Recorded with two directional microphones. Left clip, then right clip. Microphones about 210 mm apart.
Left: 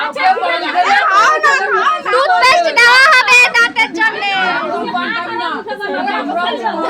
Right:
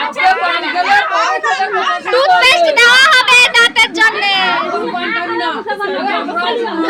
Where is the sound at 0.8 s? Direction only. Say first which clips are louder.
Left 3 dB; 60° left (ahead or behind).